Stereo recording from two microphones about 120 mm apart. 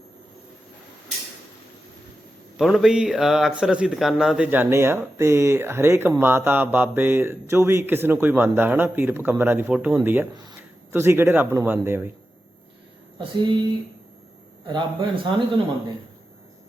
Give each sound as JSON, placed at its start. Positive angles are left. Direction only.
{"t": 2.6, "sound": "speech", "side_deg": 0}
{"t": 4.5, "sound": "speech", "side_deg": -20}
{"t": 13.1, "sound": "speech", "side_deg": -40}
{"t": 14.7, "sound": "a man's voice", "side_deg": -45}